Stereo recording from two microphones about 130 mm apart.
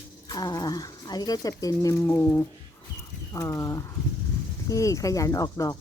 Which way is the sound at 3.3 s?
25° left (ahead or behind).